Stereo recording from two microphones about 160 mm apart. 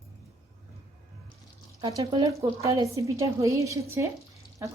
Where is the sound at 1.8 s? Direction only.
20° right (ahead or behind).